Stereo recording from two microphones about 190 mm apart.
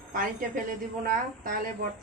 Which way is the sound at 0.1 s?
45° right (ahead or behind).